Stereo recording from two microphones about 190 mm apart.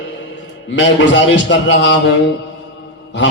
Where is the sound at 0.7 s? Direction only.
75° left (ahead or behind).